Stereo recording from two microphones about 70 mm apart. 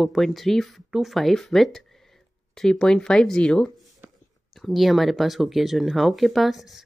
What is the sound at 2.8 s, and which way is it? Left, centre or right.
Speech, centre.